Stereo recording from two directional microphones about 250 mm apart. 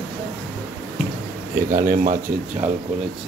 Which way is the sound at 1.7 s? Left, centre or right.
Right.